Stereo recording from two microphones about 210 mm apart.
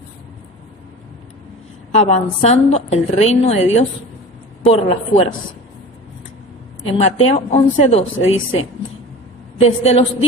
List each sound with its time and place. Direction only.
1.9 s a woman's voice: 30° left (ahead or behind)
7.0 s a woman's voice: 30° left (ahead or behind)